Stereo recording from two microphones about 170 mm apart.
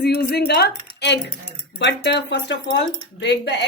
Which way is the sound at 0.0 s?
70° left (ahead or behind).